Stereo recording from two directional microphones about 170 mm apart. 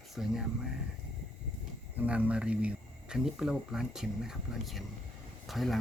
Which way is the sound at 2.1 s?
10° right (ahead or behind).